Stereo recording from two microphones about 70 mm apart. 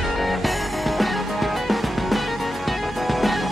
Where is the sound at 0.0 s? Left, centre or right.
Centre.